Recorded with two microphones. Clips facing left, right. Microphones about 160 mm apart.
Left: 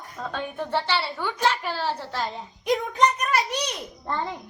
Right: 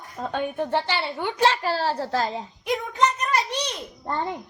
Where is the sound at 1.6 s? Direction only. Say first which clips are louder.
Right 4 dB; 40° right (ahead or behind).